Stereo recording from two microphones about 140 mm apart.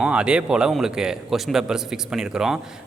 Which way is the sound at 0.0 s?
5° right (ahead or behind).